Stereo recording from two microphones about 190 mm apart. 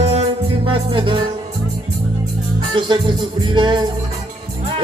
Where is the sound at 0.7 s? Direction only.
25° right (ahead or behind).